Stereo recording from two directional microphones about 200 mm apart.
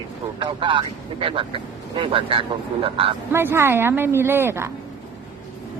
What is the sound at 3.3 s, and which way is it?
Speech, 10° right (ahead or behind).